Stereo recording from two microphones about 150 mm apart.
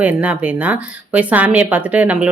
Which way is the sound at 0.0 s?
10° right (ahead or behind).